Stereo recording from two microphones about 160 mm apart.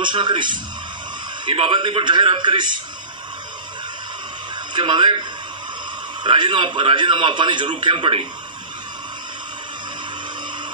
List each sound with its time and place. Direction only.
0.0 s a man's voice: 30° right (ahead or behind)
4.7 s a man's voice: 30° right (ahead or behind)
6.2 s a man's voice: 30° right (ahead or behind)